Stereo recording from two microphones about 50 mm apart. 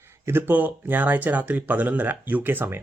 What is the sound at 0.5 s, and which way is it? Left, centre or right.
Speech, right.